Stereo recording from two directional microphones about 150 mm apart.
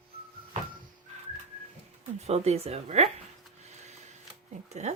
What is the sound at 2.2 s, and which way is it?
Speech, 45° right (ahead or behind).